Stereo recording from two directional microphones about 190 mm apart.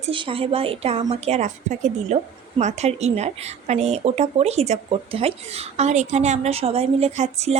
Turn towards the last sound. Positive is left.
turn(degrees=-35)  # may be behind; listen again after turning